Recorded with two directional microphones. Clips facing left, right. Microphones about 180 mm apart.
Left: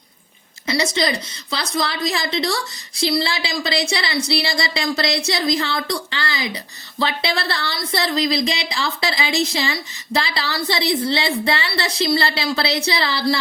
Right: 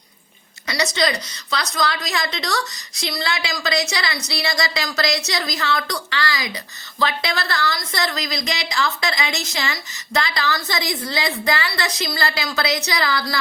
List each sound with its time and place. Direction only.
0.7 s a woman's voice: 25° left (ahead or behind)